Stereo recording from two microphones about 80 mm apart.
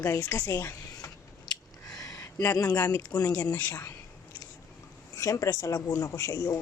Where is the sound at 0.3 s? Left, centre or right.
Left.